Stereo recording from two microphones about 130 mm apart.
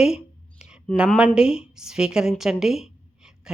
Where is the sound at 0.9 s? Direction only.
10° right (ahead or behind).